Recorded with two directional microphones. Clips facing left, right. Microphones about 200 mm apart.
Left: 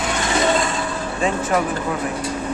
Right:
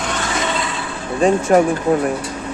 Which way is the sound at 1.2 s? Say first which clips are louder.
Right 8 dB; 45° right (ahead or behind).